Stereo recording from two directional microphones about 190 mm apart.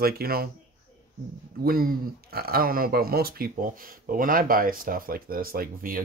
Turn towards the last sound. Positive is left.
turn(degrees=-50)  # may be behind; listen again after turning